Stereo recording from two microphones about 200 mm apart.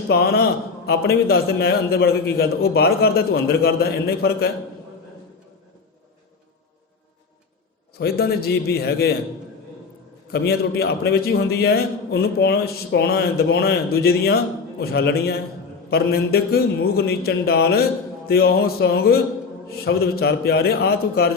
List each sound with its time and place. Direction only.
0.1 s a man's voice: 50° left (ahead or behind)
7.9 s a man's voice: 50° left (ahead or behind)
10.3 s a man's voice: 50° left (ahead or behind)